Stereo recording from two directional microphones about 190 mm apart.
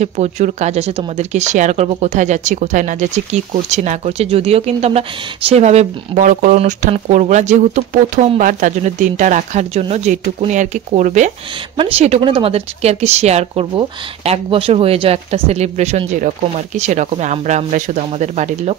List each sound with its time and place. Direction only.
0.0 s speech: 35° right (ahead or behind)